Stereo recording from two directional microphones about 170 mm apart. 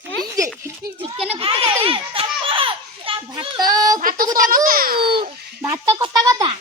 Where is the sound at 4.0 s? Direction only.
55° right (ahead or behind).